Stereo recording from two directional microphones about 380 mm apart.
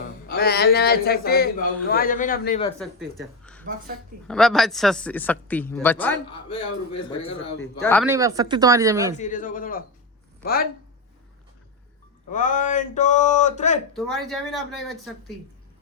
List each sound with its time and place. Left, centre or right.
0.3 s speech: left
2.7 s a man's voice: centre
7.8 s speech: centre
8.1 s speech: centre
9.1 s speech: centre
12.3 s speech: centre
13.9 s speech: centre